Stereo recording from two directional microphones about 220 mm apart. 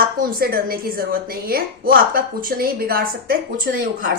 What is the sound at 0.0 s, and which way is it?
Speech, 40° right (ahead or behind).